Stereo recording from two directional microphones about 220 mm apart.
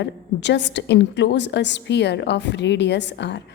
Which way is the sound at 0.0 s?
50° left (ahead or behind).